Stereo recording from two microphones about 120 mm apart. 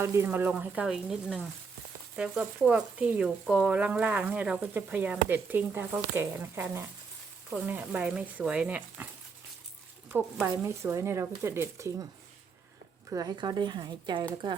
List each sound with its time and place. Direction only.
0.0 s speech: 20° right (ahead or behind)
10.6 s speech: 25° right (ahead or behind)
13.1 s speech: 30° right (ahead or behind)